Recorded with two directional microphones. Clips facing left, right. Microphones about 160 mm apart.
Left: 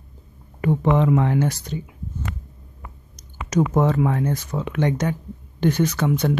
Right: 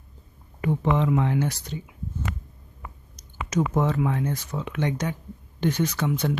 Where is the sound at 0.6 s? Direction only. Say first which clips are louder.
Left 4 dB; 50° left (ahead or behind).